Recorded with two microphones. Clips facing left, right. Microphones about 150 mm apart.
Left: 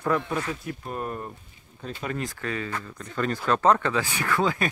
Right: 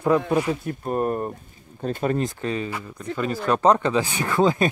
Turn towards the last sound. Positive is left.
turn(degrees=-25)  # may be behind; listen again after turning